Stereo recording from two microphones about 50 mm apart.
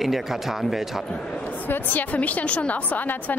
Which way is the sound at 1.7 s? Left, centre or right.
Left.